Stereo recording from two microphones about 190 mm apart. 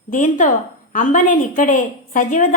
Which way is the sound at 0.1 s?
40° left (ahead or behind).